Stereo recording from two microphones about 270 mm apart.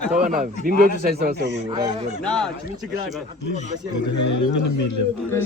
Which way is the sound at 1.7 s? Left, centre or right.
Centre.